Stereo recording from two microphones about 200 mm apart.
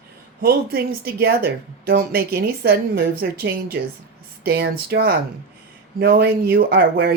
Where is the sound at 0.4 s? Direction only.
50° right (ahead or behind).